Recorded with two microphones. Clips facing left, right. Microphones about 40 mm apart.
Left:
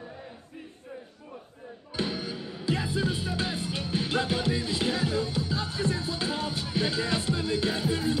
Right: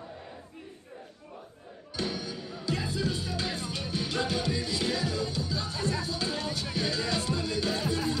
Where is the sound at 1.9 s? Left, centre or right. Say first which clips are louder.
Left 2 dB; left.